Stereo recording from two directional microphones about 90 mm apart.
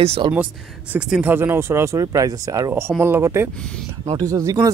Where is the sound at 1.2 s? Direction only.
25° right (ahead or behind); by 2.7 s 45° right (ahead or behind).